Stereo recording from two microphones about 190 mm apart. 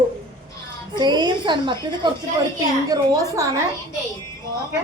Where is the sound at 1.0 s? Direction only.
20° right (ahead or behind).